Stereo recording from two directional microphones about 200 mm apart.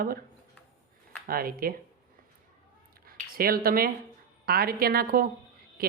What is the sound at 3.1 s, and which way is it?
Speech, 45° right (ahead or behind).